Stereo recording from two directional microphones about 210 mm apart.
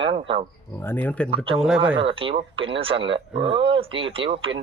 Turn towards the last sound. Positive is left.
turn(degrees=-25)  # may be behind; listen again after turning